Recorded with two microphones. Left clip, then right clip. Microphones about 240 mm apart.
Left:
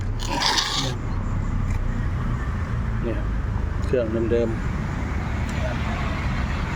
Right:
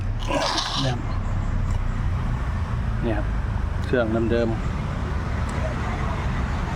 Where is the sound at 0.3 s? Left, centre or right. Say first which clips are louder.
Left 1 dB; centre.